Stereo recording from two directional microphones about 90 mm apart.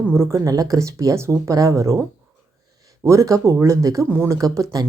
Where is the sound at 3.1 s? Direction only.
35° right (ahead or behind).